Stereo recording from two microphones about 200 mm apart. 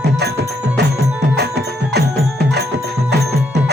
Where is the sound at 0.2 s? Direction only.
55° right (ahead or behind).